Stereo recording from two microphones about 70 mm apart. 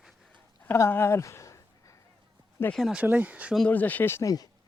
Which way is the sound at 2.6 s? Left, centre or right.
Left.